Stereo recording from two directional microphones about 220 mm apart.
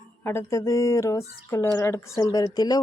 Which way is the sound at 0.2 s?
10° left (ahead or behind).